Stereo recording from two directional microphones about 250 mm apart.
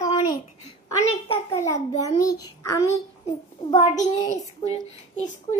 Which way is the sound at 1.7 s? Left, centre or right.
Centre.